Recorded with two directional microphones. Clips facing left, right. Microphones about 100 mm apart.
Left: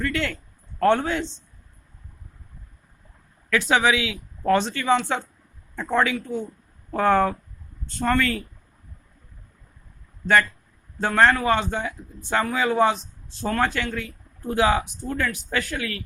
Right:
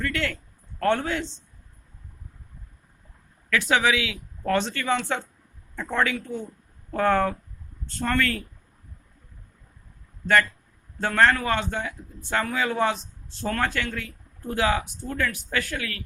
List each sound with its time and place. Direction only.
0.0 s a man's voice: 25° left (ahead or behind)
3.5 s a man's voice: 25° left (ahead or behind)
11.0 s a man's voice: 20° left (ahead or behind)